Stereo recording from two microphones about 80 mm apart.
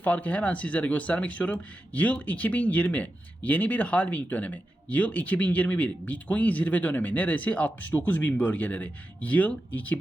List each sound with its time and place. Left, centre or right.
0.0 s speech: centre